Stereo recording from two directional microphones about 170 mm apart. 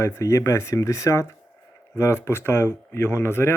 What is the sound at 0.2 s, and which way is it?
Speech, 20° left (ahead or behind).